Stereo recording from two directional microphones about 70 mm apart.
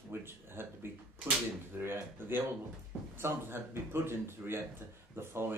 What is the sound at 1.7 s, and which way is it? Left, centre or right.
Speech, right.